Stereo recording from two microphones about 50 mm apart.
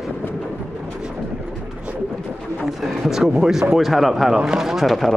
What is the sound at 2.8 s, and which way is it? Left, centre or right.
Speech, centre.